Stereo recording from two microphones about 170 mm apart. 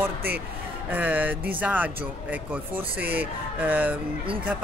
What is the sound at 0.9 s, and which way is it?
Speech, 10° right (ahead or behind).